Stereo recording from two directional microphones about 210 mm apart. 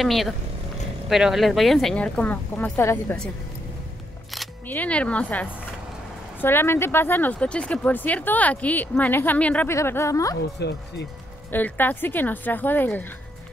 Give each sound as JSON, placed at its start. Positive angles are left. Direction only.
{"t": 0.0, "sound": "speech", "side_deg": 0}
{"t": 4.3, "sound": "speech", "side_deg": 5}
{"t": 10.6, "sound": "speech", "side_deg": 55}
{"t": 11.5, "sound": "speech", "side_deg": 10}